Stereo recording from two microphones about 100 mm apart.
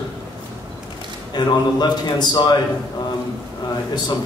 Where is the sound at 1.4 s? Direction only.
45° left (ahead or behind).